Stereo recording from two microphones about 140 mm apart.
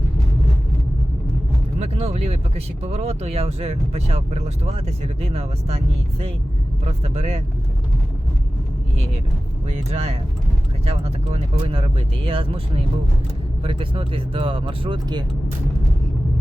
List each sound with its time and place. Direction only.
1.8 s speech: 50° right (ahead or behind)
9.6 s speech: 50° right (ahead or behind); by 15.2 s 35° right (ahead or behind)